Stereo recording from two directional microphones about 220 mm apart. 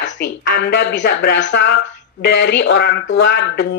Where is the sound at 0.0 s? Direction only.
55° left (ahead or behind).